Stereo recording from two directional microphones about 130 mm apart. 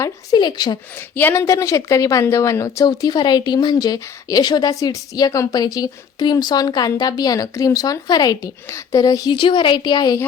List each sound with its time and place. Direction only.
0.0 s a woman's voice: 30° left (ahead or behind)
1.1 s a woman's voice: 15° left (ahead or behind); by 10.2 s 35° left (ahead or behind)